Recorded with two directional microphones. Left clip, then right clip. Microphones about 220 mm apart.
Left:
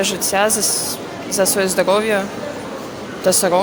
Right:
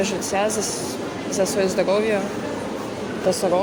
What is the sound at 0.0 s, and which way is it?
Speech, 40° left (ahead or behind).